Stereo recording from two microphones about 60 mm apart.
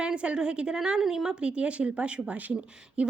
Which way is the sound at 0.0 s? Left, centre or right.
Centre.